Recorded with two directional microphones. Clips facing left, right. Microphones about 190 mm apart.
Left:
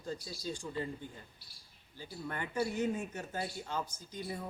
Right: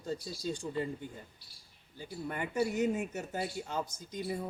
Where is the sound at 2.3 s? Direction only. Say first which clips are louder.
Right 3 dB; 15° right (ahead or behind).